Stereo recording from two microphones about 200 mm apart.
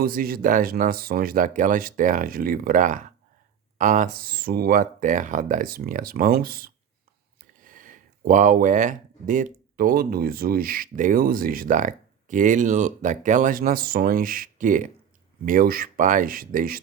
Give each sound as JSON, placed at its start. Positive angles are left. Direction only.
{"t": 0.0, "sound": "speech", "side_deg": -45}